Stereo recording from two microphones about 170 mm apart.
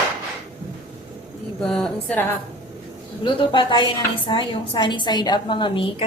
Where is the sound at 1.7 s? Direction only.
5° left (ahead or behind).